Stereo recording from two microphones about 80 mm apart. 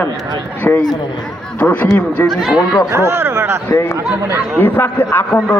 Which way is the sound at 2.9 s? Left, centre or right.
Right.